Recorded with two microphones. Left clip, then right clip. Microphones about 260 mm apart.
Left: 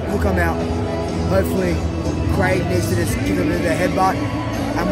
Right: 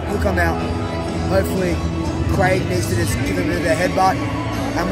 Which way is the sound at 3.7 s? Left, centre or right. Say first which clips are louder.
Right 2 dB; centre.